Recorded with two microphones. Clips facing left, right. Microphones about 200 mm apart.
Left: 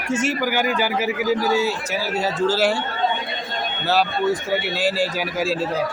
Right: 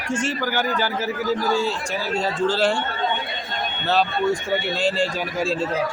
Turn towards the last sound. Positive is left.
turn(degrees=5)  # may be behind; listen again after turning